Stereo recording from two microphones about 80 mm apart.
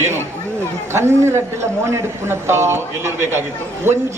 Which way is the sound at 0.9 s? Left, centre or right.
Right.